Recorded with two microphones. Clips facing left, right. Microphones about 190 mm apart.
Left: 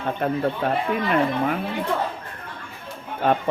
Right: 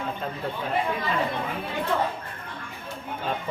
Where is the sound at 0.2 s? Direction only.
65° left (ahead or behind).